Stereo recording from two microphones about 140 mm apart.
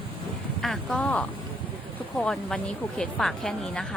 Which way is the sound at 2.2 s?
5° left (ahead or behind).